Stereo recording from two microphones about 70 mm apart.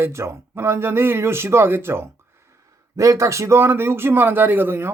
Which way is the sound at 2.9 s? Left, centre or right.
Right.